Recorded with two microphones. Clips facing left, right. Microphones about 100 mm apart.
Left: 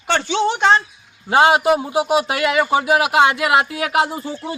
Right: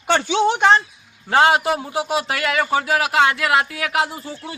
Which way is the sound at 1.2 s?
15° left (ahead or behind).